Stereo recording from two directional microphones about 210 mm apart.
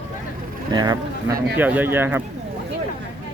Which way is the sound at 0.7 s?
20° right (ahead or behind).